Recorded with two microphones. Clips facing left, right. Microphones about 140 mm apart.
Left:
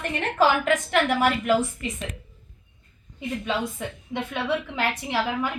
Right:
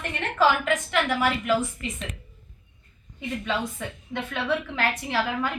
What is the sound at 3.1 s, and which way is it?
A woman's voice, 15° left (ahead or behind).